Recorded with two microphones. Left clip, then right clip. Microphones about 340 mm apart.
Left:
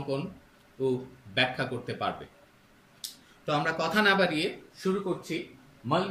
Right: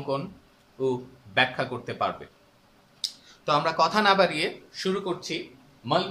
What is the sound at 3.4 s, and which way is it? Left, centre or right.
Speech, centre.